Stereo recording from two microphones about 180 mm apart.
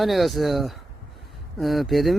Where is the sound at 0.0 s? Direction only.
Centre (ahead or behind).